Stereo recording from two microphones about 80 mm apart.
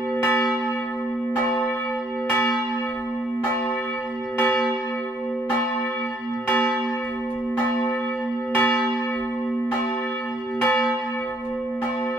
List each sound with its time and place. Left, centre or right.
0.2 s church bell: left
6.5 s church bell: left
8.5 s church bell: left
10.6 s church bell: centre